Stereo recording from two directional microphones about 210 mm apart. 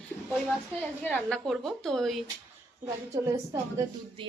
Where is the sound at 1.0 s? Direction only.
5° left (ahead or behind).